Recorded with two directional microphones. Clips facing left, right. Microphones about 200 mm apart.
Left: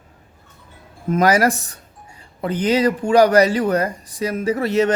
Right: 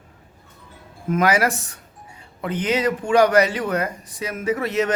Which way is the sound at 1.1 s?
40° left (ahead or behind).